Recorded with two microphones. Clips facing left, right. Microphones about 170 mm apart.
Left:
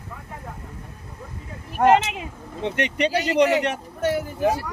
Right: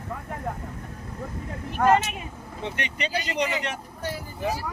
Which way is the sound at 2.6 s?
65° left (ahead or behind).